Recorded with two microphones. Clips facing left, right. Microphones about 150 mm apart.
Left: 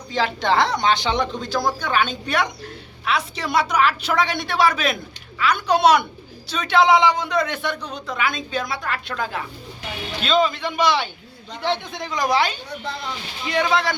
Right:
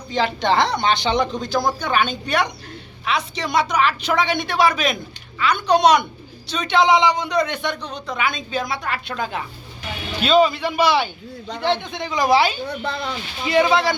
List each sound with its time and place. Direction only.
0.1 s a woman's voice: centre (ahead or behind)